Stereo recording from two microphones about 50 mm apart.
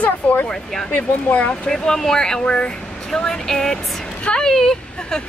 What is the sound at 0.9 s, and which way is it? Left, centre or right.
Speech, left.